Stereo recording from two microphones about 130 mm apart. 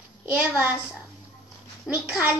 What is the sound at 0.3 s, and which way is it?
Speech, 15° right (ahead or behind).